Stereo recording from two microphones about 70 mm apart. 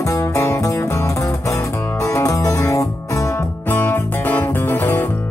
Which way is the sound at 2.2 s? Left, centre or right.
Left.